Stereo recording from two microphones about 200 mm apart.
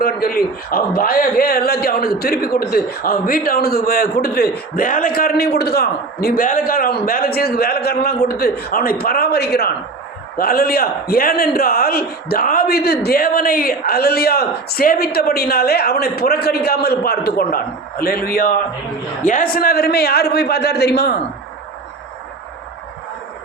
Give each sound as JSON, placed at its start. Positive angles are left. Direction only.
{"t": 0.0, "sound": "a man's voice", "side_deg": 50}